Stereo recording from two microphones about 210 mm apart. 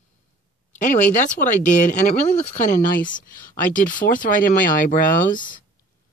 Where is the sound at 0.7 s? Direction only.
35° left (ahead or behind).